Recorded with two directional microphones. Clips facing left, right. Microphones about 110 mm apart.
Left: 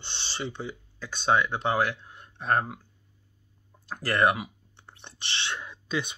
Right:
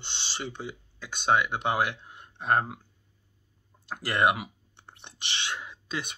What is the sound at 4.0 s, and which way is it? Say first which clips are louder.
Speech: left 1 dB; 15° right (ahead or behind).